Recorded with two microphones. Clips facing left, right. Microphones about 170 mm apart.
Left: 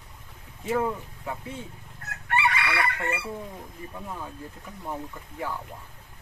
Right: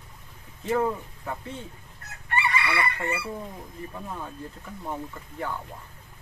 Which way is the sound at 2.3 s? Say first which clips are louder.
Left 1 dB; 80° left.